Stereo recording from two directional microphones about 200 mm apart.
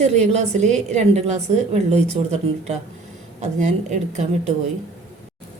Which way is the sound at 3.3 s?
35° right (ahead or behind).